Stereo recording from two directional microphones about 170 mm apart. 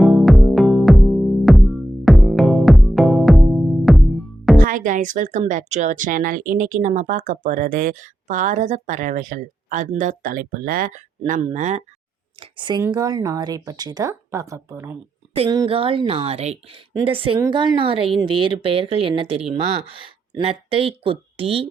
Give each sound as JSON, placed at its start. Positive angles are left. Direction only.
{"t": 0.0, "sound": "music", "side_deg": 0}
{"t": 4.5, "sound": "speech", "side_deg": -50}
{"t": 11.3, "sound": "speech", "side_deg": -40}
{"t": 12.4, "sound": "speech", "side_deg": -25}
{"t": 15.7, "sound": "a woman's voice", "side_deg": -30}